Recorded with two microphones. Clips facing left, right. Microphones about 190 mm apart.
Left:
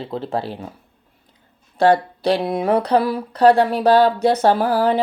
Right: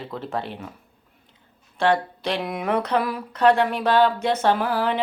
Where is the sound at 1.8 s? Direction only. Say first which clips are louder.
Left 6 dB; 35° left (ahead or behind).